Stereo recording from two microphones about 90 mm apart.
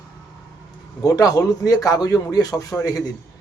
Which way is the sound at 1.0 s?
45° left (ahead or behind).